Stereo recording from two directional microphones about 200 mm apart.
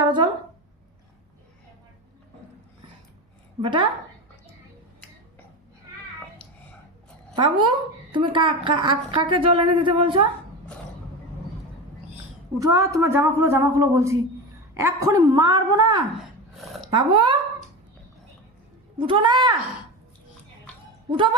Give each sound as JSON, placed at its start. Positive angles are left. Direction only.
{"t": 0.0, "sound": "a sound", "side_deg": -25}
{"t": 3.6, "sound": "a woman's voice", "side_deg": -25}
{"t": 7.3, "sound": "a woman's voice", "side_deg": -25}
{"t": 12.5, "sound": "a woman's voice", "side_deg": -15}
{"t": 18.9, "sound": "a woman's voice", "side_deg": -25}